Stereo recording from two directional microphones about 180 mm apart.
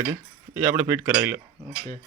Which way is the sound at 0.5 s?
10° right (ahead or behind).